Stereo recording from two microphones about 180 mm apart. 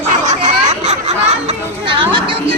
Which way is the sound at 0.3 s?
40° right (ahead or behind).